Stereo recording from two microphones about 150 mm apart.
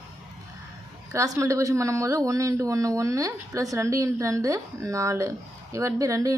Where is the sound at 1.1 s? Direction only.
20° right (ahead or behind).